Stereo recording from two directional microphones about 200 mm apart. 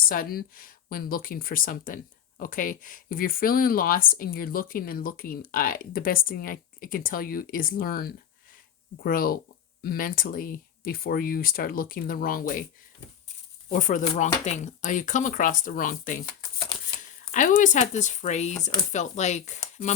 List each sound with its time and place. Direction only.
0.0 s speech: 45° left (ahead or behind)
13.7 s speech: 40° left (ahead or behind)
17.3 s speech: 40° left (ahead or behind)